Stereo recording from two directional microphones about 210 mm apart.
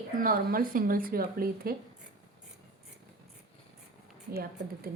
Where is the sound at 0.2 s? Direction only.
45° right (ahead or behind).